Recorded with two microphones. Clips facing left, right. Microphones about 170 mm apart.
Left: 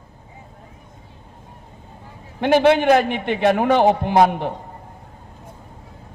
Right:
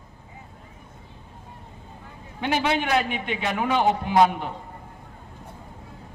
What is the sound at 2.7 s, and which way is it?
A man's voice, 55° left (ahead or behind).